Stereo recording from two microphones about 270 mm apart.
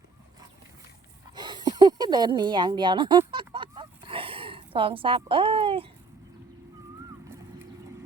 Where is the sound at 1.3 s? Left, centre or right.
Centre.